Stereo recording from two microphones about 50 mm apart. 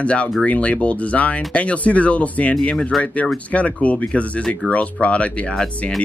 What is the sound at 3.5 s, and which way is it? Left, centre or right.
Speech, left.